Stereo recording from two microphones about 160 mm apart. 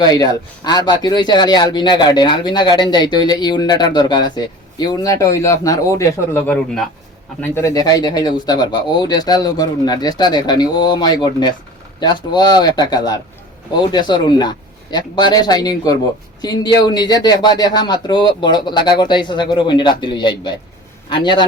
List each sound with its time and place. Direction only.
0.0 s speech: 25° left (ahead or behind)
7.4 s speech: 15° left (ahead or behind)